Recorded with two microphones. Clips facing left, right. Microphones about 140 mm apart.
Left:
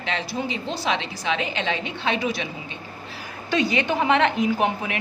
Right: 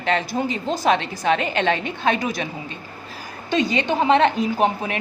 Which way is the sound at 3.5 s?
25° right (ahead or behind).